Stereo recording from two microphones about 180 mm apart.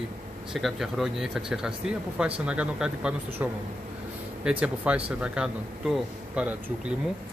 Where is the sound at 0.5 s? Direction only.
Centre (ahead or behind).